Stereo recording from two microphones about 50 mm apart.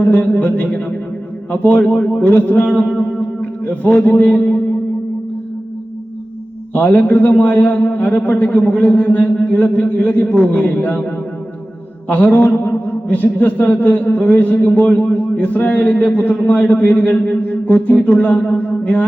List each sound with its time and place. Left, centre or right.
0.0 s a man's voice: left
2.2 s a man's voice: left
2.8 s a sound: centre
3.7 s a man's voice: left
6.7 s a man's voice: left
12.0 s a man's voice: left